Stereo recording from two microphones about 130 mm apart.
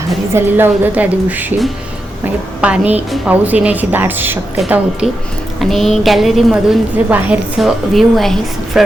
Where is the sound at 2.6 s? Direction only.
10° right (ahead or behind).